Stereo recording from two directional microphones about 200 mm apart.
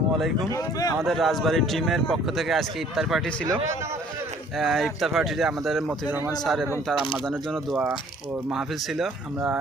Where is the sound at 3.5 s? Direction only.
15° right (ahead or behind).